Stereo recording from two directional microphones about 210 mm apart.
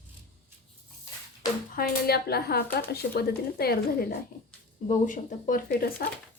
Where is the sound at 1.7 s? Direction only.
50° left (ahead or behind).